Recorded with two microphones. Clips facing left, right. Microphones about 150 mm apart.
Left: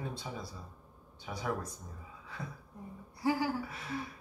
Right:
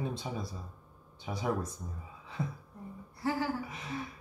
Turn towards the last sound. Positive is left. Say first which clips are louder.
# even
turn(degrees=-20)  # may be behind; listen again after turning